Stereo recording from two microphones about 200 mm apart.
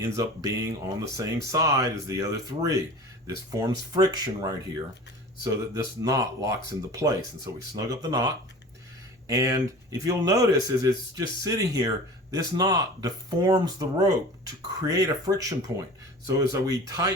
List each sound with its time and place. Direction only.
0.0 s speech: 15° right (ahead or behind)